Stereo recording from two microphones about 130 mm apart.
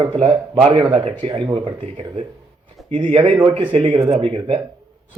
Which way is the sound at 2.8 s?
Centre (ahead or behind).